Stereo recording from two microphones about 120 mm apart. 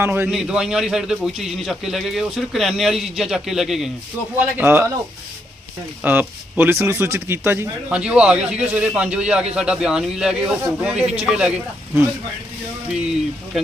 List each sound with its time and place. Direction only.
0.0 s speech: 15° right (ahead or behind)
0.3 s a man's voice: 5° right (ahead or behind)
4.4 s speech: 15° right (ahead or behind)
6.0 s speech: 15° right (ahead or behind)